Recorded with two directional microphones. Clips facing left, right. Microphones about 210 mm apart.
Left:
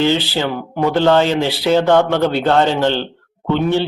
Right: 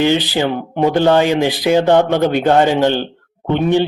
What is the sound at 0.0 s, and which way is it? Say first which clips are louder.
Speech: right 2 dB; 15° right (ahead or behind).